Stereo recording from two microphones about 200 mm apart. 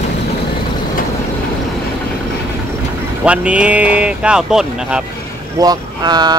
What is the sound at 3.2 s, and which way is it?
Speech, 5° right (ahead or behind).